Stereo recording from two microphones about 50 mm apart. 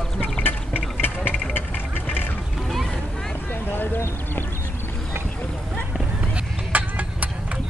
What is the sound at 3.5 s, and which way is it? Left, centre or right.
Clip-clop, left.